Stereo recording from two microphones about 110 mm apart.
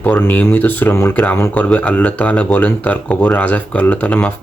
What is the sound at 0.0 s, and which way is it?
Speech, 15° left (ahead or behind).